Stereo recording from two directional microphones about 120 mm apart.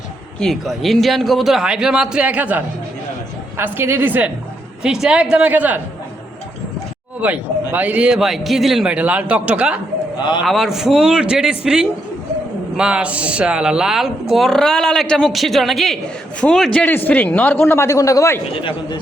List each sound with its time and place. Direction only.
0.3 s a man's voice: 5° left (ahead or behind); by 5.8 s 15° right (ahead or behind)
7.2 s a man's voice: 15° right (ahead or behind)
10.2 s a man's voice: 40° left (ahead or behind)
10.4 s speech: centre (ahead or behind); by 18.3 s 25° left (ahead or behind)